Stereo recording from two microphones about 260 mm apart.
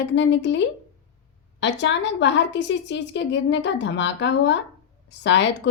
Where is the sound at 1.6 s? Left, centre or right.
Left.